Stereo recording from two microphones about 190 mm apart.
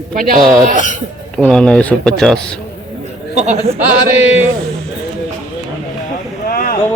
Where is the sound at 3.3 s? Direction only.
35° right (ahead or behind).